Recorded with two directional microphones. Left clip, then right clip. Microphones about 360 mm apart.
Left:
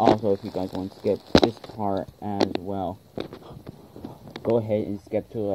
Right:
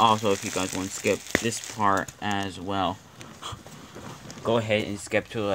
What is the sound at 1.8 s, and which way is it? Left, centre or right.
Speech, right.